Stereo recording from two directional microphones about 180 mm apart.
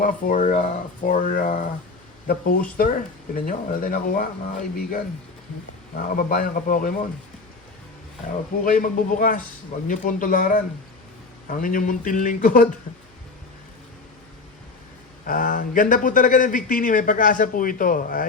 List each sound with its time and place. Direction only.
0.0 s speech: 45° left (ahead or behind)
6.0 s speech: 55° left (ahead or behind)
8.6 s speech: 50° left (ahead or behind)
15.3 s speech: 50° left (ahead or behind)